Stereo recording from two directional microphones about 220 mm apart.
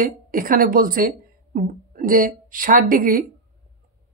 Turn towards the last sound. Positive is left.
turn(degrees=-40)  # may be behind; listen again after turning